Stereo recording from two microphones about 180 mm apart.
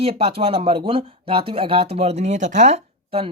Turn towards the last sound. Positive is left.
turn(degrees=-30)  # may be behind; listen again after turning